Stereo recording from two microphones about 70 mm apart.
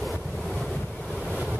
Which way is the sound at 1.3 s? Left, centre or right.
Centre.